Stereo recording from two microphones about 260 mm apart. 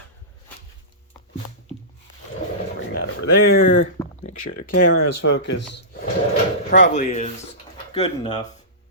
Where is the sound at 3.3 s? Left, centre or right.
Left.